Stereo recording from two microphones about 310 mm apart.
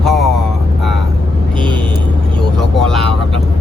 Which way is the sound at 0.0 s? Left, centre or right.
Centre.